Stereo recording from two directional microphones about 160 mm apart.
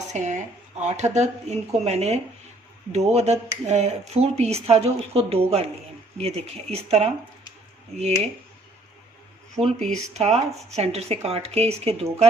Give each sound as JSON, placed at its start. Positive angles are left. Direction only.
{"t": 0.1, "sound": "speech", "side_deg": -50}
{"t": 9.9, "sound": "speech", "side_deg": -45}